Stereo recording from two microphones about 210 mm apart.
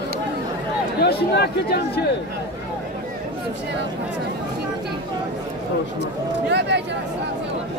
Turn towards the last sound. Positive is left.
turn(degrees=-55)  # may be behind; listen again after turning